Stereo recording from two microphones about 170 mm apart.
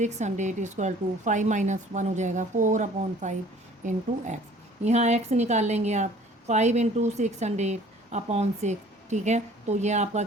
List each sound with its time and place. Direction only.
0.0 s a woman's voice: 45° right (ahead or behind)